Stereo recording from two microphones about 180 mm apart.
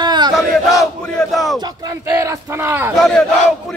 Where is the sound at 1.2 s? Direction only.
Centre (ahead or behind).